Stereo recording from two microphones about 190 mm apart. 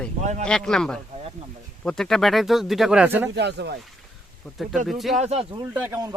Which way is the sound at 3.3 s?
65° right (ahead or behind).